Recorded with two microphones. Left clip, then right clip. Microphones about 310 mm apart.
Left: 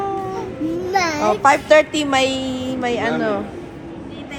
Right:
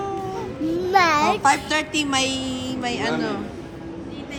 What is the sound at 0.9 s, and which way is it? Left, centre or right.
A child's voice, centre.